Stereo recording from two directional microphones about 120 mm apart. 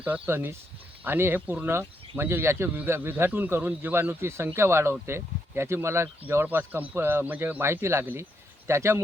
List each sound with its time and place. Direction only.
0.0 s speech: 15° right (ahead or behind)